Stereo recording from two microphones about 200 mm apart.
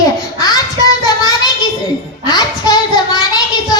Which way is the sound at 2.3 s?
20° left (ahead or behind).